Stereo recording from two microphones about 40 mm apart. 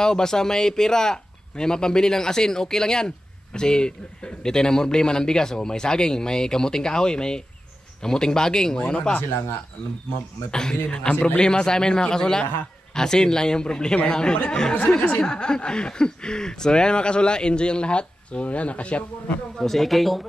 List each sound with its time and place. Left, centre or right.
0.0 s speech: centre
10.5 s speech: centre
19.6 s speech: centre